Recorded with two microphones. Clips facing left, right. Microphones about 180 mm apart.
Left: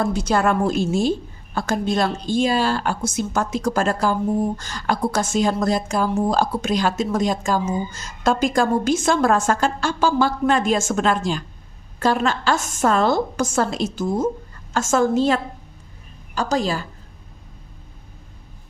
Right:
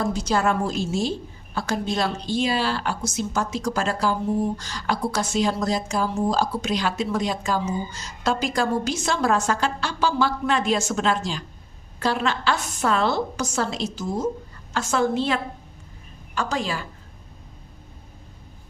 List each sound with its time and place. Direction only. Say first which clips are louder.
0.0 s a woman's voice: left 3 dB; 60° left (ahead or behind); by 16.8 s 40° left (ahead or behind)